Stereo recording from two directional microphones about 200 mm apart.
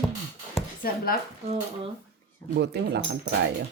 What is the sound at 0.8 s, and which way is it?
Speech, 45° left (ahead or behind).